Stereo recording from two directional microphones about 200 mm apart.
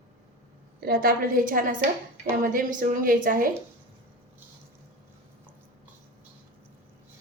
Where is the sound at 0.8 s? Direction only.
50° right (ahead or behind).